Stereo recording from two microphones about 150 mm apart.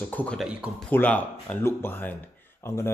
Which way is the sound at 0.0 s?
10° left (ahead or behind).